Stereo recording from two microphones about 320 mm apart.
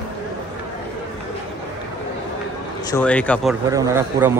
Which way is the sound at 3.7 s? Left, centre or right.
Centre.